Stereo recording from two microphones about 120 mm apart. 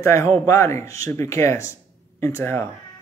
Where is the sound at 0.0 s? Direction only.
25° left (ahead or behind).